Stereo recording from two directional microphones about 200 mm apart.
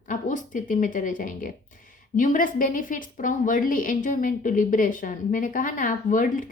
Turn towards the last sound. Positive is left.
turn(degrees=40)  # may be behind; listen again after turning